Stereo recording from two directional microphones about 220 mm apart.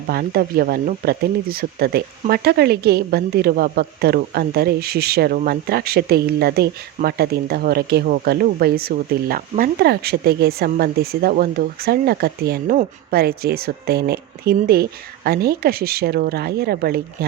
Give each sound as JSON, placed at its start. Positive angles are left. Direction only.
{"t": 0.1, "sound": "speech", "side_deg": -45}